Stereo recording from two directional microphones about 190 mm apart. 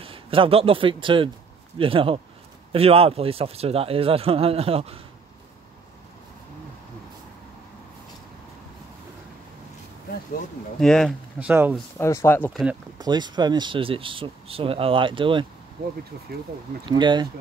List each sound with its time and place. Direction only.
0.0 s a man's voice: 30° right (ahead or behind)
10.8 s speech: 5° left (ahead or behind)
11.3 s speech: 10° right (ahead or behind)
12.0 s speech: 15° left (ahead or behind)
13.0 s speech: 20° right (ahead or behind)
16.8 s speech: 25° right (ahead or behind)